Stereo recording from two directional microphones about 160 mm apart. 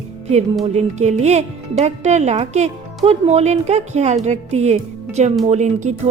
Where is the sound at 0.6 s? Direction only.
45° right (ahead or behind).